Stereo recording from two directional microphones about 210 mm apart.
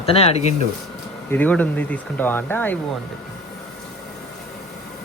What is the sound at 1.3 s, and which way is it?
Speech, 10° left (ahead or behind).